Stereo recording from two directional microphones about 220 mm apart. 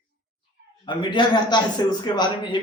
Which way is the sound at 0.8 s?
20° left (ahead or behind).